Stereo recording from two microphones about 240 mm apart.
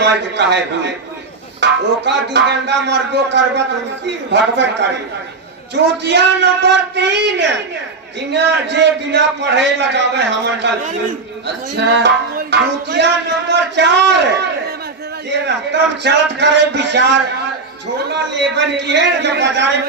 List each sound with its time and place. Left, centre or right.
1.6 s music: right
6.0 s music: right